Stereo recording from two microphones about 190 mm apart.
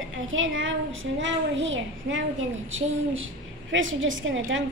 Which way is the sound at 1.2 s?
75° right (ahead or behind).